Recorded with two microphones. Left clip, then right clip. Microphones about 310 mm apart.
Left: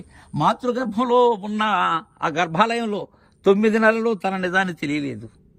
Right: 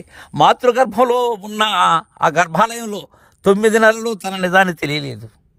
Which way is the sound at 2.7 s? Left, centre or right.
Centre.